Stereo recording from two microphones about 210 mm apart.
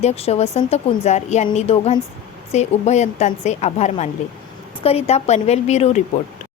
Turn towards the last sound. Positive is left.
turn(degrees=30)  # may be behind; listen again after turning